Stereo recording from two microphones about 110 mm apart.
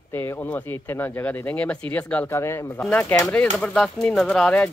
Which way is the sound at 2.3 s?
25° left (ahead or behind).